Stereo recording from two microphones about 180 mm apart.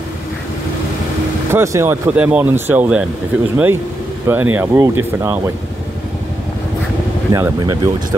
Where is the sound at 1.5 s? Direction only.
15° right (ahead or behind).